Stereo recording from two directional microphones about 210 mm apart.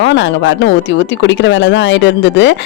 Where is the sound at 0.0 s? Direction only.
60° left (ahead or behind).